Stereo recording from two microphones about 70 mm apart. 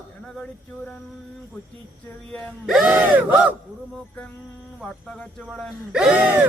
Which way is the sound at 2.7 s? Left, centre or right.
Centre.